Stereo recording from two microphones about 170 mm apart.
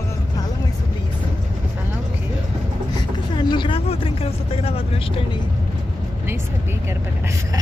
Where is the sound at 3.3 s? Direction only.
30° left (ahead or behind).